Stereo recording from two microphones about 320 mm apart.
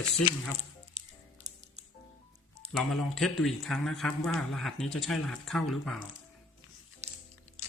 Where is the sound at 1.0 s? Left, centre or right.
Right.